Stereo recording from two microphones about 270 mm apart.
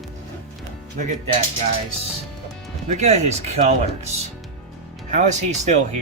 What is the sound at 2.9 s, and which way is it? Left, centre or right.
Speech, right.